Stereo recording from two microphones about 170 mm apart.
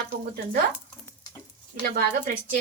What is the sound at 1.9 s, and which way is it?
Speech, 50° right (ahead or behind).